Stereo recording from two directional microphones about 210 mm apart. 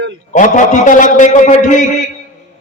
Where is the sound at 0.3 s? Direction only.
35° left (ahead or behind).